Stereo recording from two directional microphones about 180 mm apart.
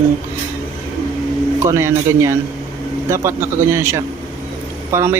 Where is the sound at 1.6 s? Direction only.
15° right (ahead or behind).